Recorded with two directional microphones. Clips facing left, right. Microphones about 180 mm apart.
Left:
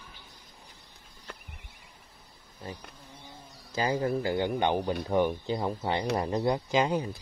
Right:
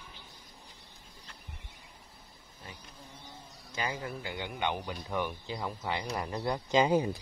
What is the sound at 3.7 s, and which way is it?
Speech, 35° left (ahead or behind).